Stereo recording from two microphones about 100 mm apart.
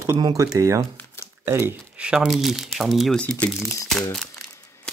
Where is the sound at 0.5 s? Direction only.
30° right (ahead or behind).